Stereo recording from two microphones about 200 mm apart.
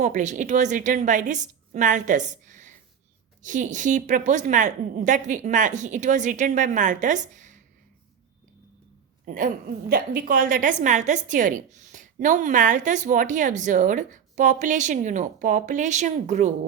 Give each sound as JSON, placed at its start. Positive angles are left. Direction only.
{"t": 0.0, "sound": "a woman's voice", "side_deg": -35}
{"t": 9.2, "sound": "a woman's voice", "side_deg": -45}